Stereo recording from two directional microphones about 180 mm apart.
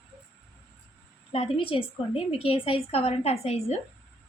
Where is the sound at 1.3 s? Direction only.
30° left (ahead or behind).